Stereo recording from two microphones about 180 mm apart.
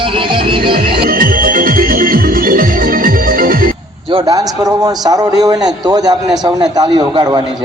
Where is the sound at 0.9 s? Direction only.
55° right (ahead or behind).